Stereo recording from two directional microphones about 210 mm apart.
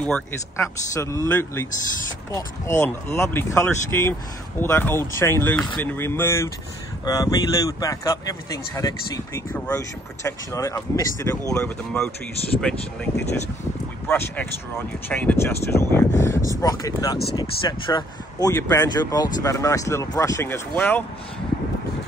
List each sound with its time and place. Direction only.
0.0 s speech: 10° left (ahead or behind)
11.5 s speech: 5° left (ahead or behind)